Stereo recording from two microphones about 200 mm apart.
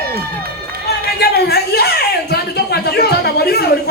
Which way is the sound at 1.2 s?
55° left (ahead or behind).